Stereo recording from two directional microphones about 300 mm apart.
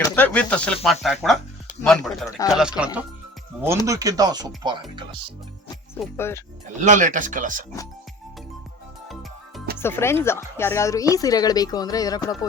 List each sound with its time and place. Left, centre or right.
0.0 s speech: centre
6.0 s a woman's voice: centre
6.8 s speech: right
9.8 s a woman's voice: centre